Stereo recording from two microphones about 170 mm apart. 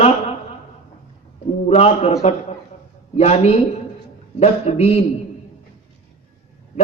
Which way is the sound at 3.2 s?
40° left (ahead or behind).